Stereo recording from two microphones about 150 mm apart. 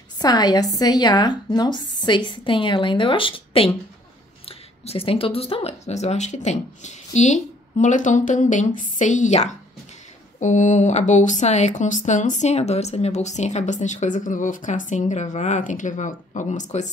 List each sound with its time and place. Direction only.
0.2 s speech: 25° left (ahead or behind); by 16.9 s 55° left (ahead or behind)